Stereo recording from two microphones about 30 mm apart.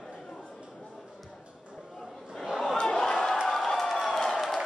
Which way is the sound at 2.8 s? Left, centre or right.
Centre.